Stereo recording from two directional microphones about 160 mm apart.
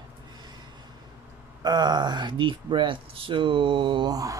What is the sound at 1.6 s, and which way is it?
Speech, 25° right (ahead or behind).